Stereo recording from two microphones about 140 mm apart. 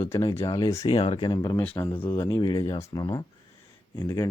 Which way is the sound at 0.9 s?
35° left (ahead or behind).